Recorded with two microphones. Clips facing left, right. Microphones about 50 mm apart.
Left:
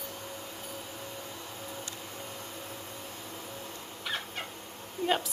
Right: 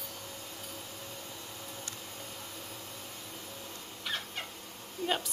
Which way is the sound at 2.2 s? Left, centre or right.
Centre.